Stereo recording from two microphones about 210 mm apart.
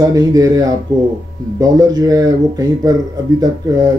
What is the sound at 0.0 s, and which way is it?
Speech, 15° right (ahead or behind).